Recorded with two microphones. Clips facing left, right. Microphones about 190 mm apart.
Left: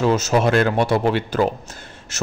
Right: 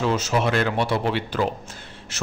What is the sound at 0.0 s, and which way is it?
A man's voice, 45° left (ahead or behind).